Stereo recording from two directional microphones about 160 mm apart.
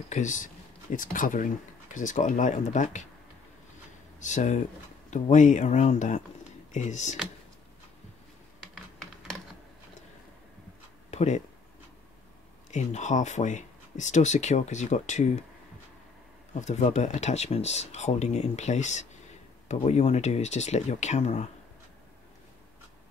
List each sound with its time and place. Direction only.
0.1 s speech: 50° left (ahead or behind)
4.2 s speech: 50° left (ahead or behind)
8.7 s computer keyboard: centre (ahead or behind)
11.1 s speech: 45° left (ahead or behind)
12.7 s speech: 45° left (ahead or behind)
16.5 s speech: 45° left (ahead or behind)